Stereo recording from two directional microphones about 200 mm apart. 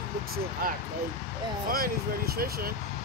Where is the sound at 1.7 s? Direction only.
50° right (ahead or behind).